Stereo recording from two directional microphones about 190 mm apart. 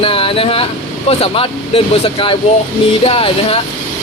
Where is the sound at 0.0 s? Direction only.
30° left (ahead or behind).